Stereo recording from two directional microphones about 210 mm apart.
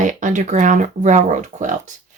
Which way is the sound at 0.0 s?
35° right (ahead or behind).